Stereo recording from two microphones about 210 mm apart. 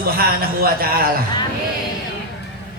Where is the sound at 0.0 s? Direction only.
45° right (ahead or behind).